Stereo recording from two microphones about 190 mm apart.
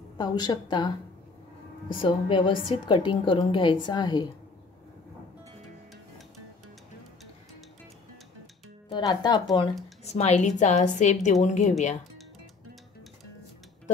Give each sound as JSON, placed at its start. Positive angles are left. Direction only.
{"t": 0.2, "sound": "a woman's voice", "side_deg": 20}
{"t": 8.9, "sound": "a woman's voice", "side_deg": 20}
{"t": 10.0, "sound": "a woman's voice", "side_deg": 35}